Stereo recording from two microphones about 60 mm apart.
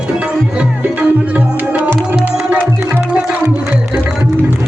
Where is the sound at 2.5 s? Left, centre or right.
Right.